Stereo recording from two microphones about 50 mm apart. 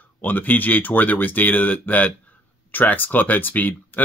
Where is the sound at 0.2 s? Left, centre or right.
Left.